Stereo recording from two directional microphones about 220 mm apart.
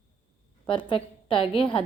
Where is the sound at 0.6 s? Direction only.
25° left (ahead or behind).